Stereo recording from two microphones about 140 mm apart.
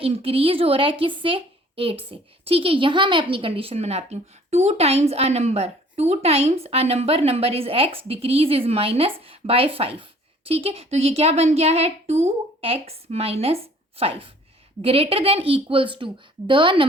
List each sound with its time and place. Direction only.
0.0 s a woman's voice: 45° right (ahead or behind)